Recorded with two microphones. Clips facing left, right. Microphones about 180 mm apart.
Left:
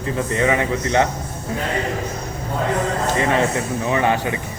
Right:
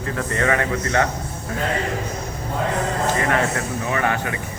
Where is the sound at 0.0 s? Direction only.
20° left (ahead or behind).